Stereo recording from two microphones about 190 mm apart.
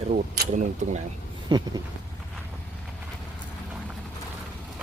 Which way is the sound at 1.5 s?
20° right (ahead or behind).